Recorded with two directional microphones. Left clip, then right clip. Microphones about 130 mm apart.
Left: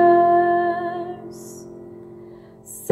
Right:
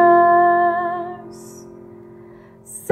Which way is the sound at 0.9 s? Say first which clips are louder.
Right 3 dB; 40° left (ahead or behind).